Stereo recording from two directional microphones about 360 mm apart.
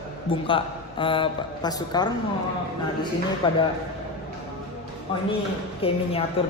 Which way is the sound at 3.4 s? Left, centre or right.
Centre.